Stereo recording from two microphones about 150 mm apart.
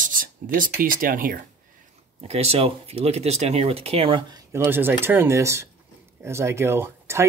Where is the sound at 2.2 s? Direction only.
45° right (ahead or behind).